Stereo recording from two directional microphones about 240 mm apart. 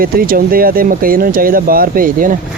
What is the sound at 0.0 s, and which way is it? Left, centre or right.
Speech, right.